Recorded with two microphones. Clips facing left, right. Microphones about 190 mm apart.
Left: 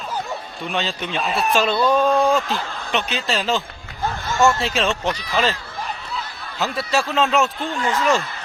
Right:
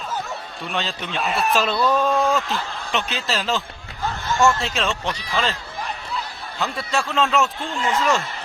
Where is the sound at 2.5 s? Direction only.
Centre (ahead or behind).